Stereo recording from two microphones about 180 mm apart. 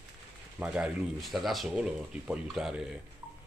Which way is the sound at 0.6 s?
5° right (ahead or behind).